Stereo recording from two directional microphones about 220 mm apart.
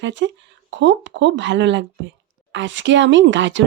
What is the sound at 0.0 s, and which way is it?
Speech, 55° right (ahead or behind).